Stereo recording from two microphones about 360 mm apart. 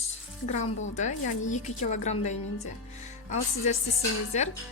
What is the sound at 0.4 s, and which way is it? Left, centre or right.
Speech, centre.